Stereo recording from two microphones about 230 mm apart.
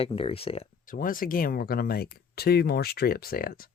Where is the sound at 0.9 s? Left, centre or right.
Left.